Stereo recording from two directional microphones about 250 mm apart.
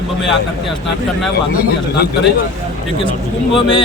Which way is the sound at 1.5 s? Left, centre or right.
Left.